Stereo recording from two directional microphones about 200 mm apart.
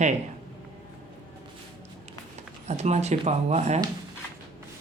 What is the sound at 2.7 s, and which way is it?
Speech, 35° right (ahead or behind).